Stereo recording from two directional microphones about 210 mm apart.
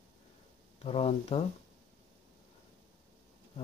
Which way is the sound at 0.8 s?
30° left (ahead or behind).